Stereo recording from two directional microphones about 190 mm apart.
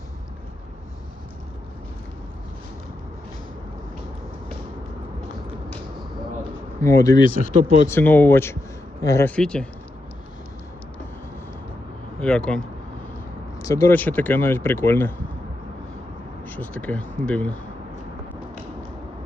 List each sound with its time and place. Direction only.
6.8 s speech: 15° left (ahead or behind)
7.9 s speech: 10° left (ahead or behind)
12.2 s speech: 5° left (ahead or behind)
13.6 s speech: 15° left (ahead or behind)
16.5 s speech: 10° left (ahead or behind)